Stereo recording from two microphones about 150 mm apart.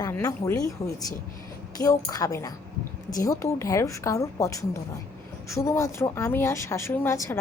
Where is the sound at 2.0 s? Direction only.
25° left (ahead or behind).